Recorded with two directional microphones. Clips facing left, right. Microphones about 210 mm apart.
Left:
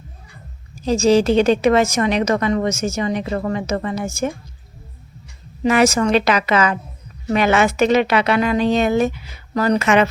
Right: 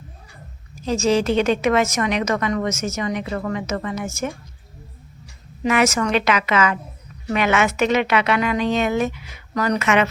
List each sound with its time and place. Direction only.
0.8 s a woman's voice: 30° left (ahead or behind)
5.6 s a woman's voice: 30° left (ahead or behind)